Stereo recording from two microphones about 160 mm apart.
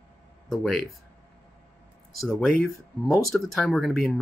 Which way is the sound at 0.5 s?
Centre (ahead or behind).